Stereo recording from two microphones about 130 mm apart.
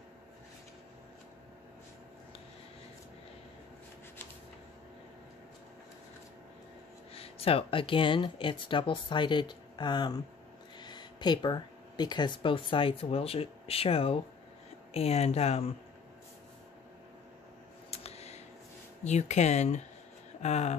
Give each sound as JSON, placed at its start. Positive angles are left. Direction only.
{"t": 7.2, "sound": "speech", "side_deg": 45}
{"t": 17.9, "sound": "a sound", "side_deg": 55}
{"t": 19.0, "sound": "speech", "side_deg": 60}